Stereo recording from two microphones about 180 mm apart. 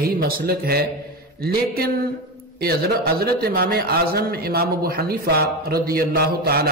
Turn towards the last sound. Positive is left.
turn(degrees=-60)  # may be behind; listen again after turning